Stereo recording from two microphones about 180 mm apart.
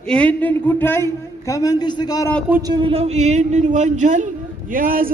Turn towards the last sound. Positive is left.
turn(degrees=-50)  # may be behind; listen again after turning